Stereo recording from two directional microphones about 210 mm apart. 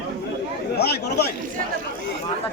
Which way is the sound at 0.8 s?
50° left (ahead or behind).